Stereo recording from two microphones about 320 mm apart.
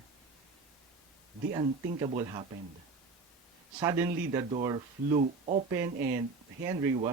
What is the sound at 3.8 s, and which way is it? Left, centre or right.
Speech, centre.